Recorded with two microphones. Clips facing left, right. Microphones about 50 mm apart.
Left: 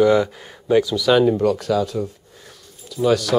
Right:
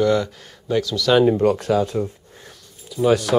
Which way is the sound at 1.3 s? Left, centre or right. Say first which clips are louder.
Right 1 dB; right.